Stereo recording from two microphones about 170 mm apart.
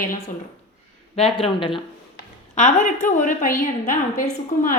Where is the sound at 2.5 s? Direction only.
45° left (ahead or behind).